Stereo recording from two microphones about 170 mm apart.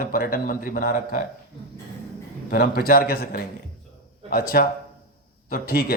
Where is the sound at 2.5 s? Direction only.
60° left (ahead or behind).